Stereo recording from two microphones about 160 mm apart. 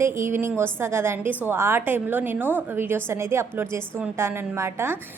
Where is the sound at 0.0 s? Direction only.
15° right (ahead or behind).